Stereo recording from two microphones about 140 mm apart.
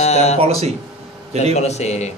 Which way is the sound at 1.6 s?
50° left (ahead or behind).